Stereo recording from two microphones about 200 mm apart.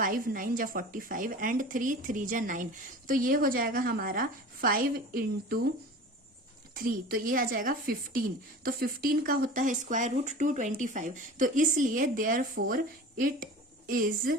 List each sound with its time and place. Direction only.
0.0 s speech: 45° right (ahead or behind)
6.7 s speech: 45° right (ahead or behind)